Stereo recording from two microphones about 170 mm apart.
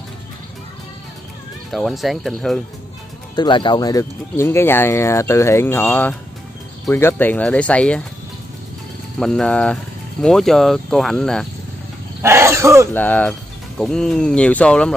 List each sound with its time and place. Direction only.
1.7 s speech: centre (ahead or behind)
3.3 s speech: 25° left (ahead or behind); by 8.0 s 5° left (ahead or behind)
9.2 s speech: 5° left (ahead or behind)
12.2 s wild animals: 15° right (ahead or behind)
12.9 s speech: 10° left (ahead or behind)